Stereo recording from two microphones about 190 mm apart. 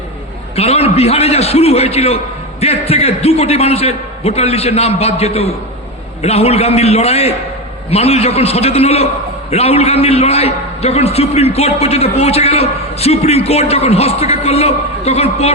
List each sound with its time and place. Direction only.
0.5 s a man's voice: 30° left (ahead or behind)